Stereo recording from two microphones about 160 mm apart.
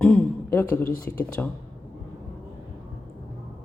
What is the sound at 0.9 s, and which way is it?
Speech, 60° left (ahead or behind).